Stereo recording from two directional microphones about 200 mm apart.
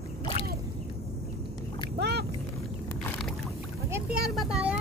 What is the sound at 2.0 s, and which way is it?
Boat, 55° right (ahead or behind).